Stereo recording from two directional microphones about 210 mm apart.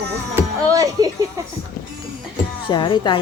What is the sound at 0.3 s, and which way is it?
Music, 15° right (ahead or behind).